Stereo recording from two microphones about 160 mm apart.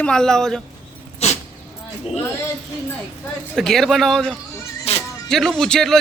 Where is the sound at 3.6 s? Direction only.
Centre (ahead or behind).